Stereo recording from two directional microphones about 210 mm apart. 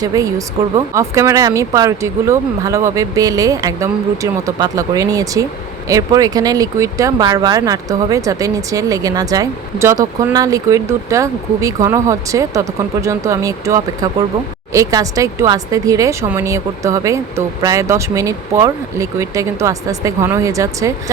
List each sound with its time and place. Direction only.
0.0 s speech: 15° right (ahead or behind)